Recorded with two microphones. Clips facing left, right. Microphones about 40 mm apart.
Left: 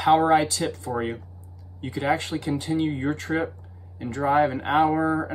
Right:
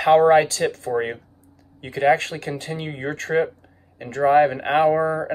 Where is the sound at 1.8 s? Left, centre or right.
Right.